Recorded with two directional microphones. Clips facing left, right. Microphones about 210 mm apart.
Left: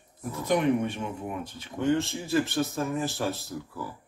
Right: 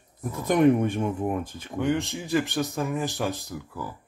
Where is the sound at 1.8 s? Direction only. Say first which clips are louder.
Left 1 dB; 15° right (ahead or behind).